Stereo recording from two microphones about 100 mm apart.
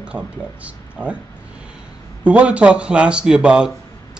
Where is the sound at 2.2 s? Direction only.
10° right (ahead or behind).